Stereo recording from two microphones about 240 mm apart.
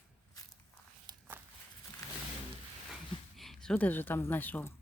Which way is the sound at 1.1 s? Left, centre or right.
Centre.